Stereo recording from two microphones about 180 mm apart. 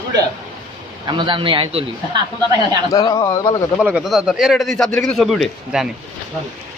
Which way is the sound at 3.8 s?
5° right (ahead or behind).